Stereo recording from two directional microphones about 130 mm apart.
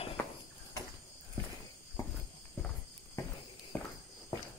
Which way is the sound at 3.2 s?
20° left (ahead or behind).